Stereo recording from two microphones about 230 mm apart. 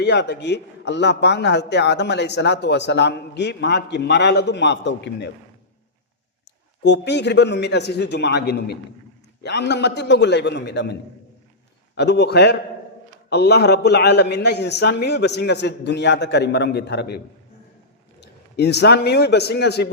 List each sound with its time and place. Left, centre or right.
0.0 s a man's voice: left
6.8 s a man's voice: left
11.9 s a man's voice: left
18.2 s a man's voice: left